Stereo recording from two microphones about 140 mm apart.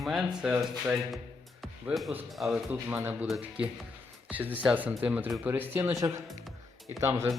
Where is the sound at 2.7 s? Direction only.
15° right (ahead or behind).